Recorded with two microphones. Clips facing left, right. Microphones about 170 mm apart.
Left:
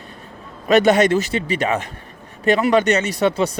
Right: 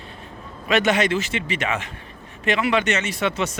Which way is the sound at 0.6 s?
40° left (ahead or behind).